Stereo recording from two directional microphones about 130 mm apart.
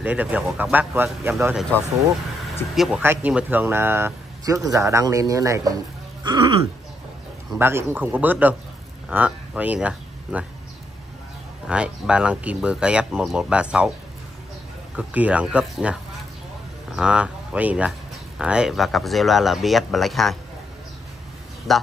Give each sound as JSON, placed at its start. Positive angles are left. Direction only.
{"t": 0.0, "sound": "speech", "side_deg": -10}
{"t": 2.7, "sound": "speech", "side_deg": 0}
{"t": 3.0, "sound": "speech", "side_deg": -15}
{"t": 6.2, "sound": "throat clearing", "side_deg": -35}
{"t": 7.5, "sound": "speech", "side_deg": -15}
{"t": 11.6, "sound": "speech", "side_deg": -10}
{"t": 15.0, "sound": "speech", "side_deg": -10}
{"t": 21.7, "sound": "speech", "side_deg": 0}